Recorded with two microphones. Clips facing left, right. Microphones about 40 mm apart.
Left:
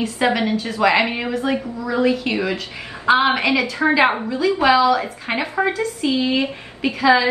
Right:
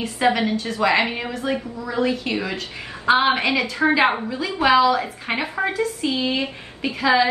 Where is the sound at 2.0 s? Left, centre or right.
Centre.